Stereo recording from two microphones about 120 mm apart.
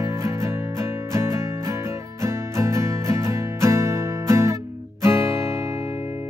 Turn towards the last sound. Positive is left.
turn(degrees=-20)  # may be behind; listen again after turning